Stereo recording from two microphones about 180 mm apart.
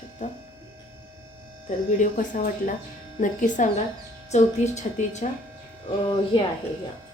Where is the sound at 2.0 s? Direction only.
45° left (ahead or behind).